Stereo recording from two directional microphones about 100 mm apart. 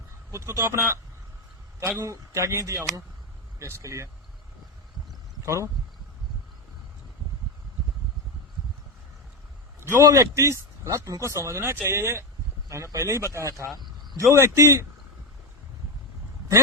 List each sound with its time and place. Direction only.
0.3 s speech: 30° right (ahead or behind)
2.0 s speech: 30° right (ahead or behind)
9.8 s speech: 30° right (ahead or behind)